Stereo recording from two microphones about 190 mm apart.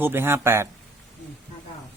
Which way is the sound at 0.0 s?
10° right (ahead or behind).